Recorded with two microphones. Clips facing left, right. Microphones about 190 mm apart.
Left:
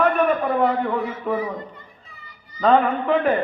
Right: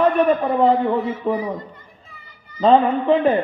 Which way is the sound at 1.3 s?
25° right (ahead or behind).